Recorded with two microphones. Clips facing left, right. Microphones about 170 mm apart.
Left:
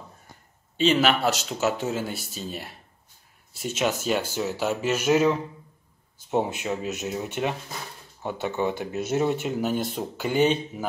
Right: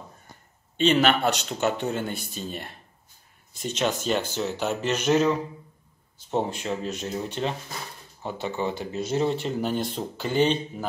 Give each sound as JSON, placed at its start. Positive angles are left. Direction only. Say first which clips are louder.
{"t": 0.7, "sound": "speech", "louder": "even", "side_deg": 5}